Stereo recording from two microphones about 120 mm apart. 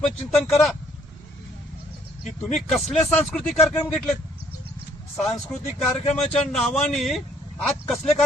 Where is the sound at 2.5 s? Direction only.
Centre (ahead or behind).